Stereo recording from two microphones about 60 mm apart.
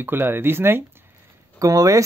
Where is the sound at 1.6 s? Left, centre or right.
Right.